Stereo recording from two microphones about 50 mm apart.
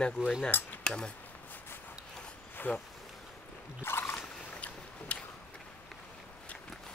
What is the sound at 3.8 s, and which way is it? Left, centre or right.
Boat, left.